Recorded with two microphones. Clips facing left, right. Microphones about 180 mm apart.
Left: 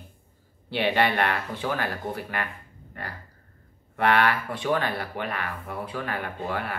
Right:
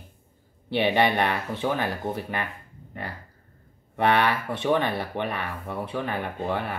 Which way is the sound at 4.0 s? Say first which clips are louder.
Even; 20° right (ahead or behind).